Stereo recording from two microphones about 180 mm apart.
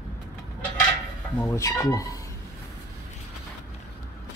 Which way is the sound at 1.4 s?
15° left (ahead or behind).